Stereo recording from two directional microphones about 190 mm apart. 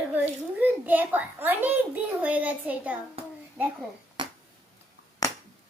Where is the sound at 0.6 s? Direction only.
10° right (ahead or behind).